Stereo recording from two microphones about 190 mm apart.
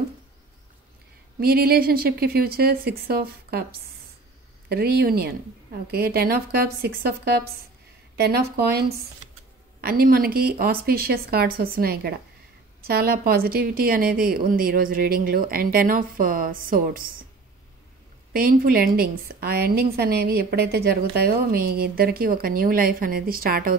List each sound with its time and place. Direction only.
1.4 s a woman's voice: 55° right (ahead or behind)
4.6 s a woman's voice: 55° right (ahead or behind)
18.3 s a woman's voice: 50° right (ahead or behind)